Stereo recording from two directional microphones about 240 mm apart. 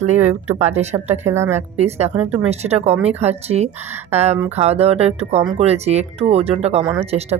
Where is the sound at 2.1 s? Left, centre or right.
Centre.